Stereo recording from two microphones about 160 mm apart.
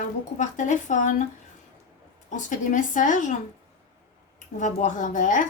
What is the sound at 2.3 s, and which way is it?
Speech, 50° left (ahead or behind).